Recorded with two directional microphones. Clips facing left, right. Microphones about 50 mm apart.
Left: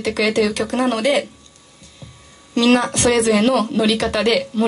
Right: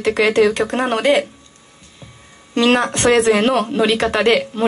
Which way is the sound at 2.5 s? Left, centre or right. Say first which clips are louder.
Even; right.